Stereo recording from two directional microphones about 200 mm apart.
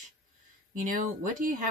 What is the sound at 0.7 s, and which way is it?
Speech, 40° right (ahead or behind).